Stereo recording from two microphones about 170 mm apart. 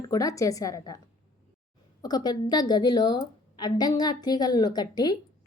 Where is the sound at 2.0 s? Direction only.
25° left (ahead or behind).